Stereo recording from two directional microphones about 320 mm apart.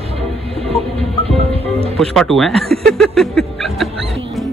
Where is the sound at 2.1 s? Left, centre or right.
Centre.